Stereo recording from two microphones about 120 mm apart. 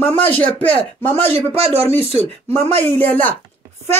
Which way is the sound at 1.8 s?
20° left (ahead or behind).